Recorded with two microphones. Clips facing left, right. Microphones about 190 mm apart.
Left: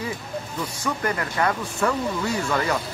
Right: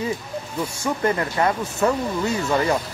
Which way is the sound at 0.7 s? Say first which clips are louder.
Right 4 dB; 25° right (ahead or behind).